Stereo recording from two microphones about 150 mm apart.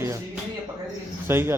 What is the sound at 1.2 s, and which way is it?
Speech, 15° right (ahead or behind).